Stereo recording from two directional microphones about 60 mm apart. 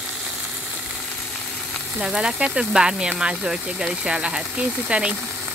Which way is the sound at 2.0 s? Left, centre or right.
Centre.